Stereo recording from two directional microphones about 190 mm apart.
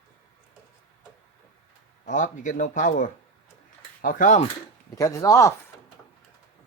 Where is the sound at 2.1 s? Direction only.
40° left (ahead or behind).